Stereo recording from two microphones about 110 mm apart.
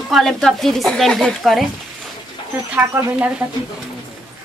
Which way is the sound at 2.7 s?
15° right (ahead or behind).